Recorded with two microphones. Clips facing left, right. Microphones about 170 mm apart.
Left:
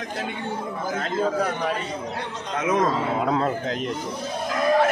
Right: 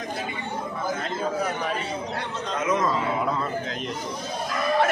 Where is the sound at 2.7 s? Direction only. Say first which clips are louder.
Left 2 dB; 70° left (ahead or behind).